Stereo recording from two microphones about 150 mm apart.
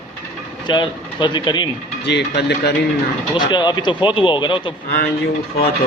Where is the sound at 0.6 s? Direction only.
30° left (ahead or behind).